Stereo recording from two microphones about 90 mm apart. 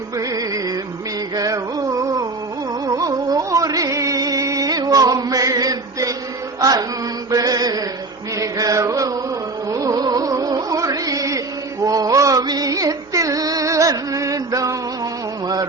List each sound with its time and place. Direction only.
0.2 s music: 40° right (ahead or behind)
1.4 s a sound: 40° right (ahead or behind)
2.8 s music: 40° right (ahead or behind)
7.3 s mantra: 40° right (ahead or behind)
8.4 s chant: 40° right (ahead or behind)
9.6 s music: 40° right (ahead or behind)